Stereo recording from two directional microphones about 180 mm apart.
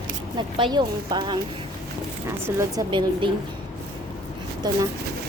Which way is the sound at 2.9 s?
25° right (ahead or behind).